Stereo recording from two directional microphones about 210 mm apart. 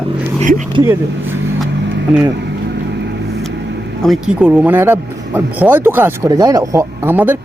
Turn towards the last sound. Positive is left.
turn(degrees=-10)  # may be behind; listen again after turning